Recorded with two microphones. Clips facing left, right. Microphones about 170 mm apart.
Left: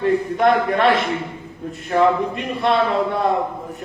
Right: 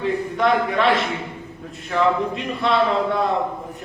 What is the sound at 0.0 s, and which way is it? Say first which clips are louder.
A man's voice: left 4 dB; 55° left (ahead or behind).